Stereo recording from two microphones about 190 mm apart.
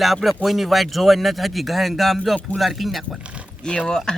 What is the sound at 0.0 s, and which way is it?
Speech, centre (ahead or behind).